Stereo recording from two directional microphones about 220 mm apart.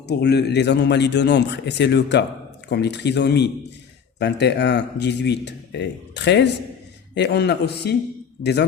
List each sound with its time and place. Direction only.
0.1 s speech: 50° left (ahead or behind)